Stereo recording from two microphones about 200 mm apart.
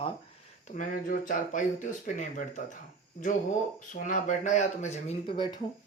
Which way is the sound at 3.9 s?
40° left (ahead or behind).